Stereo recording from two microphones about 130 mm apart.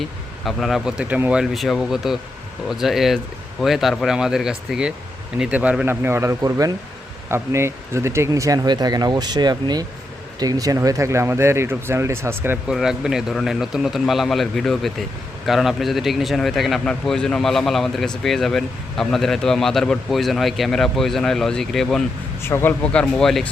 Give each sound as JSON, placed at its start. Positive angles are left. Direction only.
{"t": 0.4, "sound": "speech", "side_deg": 0}
{"t": 12.6, "sound": "speech", "side_deg": -5}
{"t": 22.4, "sound": "speech", "side_deg": 20}